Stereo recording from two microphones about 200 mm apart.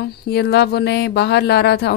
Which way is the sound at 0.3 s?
55° left (ahead or behind).